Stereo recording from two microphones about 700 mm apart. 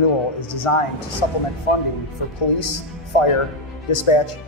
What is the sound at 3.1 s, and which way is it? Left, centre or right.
Speech, left.